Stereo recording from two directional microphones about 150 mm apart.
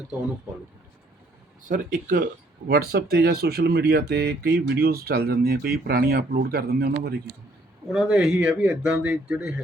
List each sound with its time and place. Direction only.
1.6 s speech: 60° right (ahead or behind)
2.6 s speech: 90° right
7.9 s speech: 5° right (ahead or behind)